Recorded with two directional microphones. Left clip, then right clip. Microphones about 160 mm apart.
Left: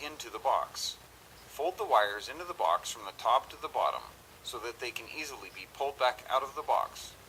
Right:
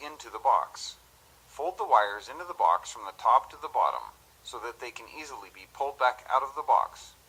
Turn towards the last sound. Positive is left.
turn(degrees=25)  # may be behind; listen again after turning